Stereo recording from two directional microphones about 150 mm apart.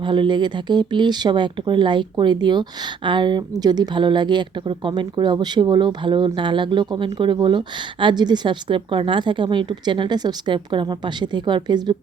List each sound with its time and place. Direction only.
0.0 s speech: 30° right (ahead or behind)